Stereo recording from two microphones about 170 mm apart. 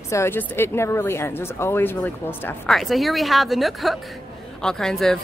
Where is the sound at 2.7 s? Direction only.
Centre (ahead or behind).